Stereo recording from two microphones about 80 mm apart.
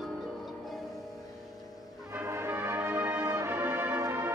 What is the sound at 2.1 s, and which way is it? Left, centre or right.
Brass instrument, right.